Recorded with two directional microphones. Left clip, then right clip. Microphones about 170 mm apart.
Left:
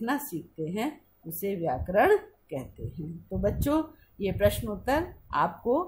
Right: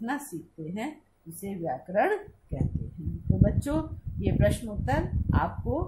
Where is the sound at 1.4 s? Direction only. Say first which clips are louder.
Left 4 dB; 55° left (ahead or behind).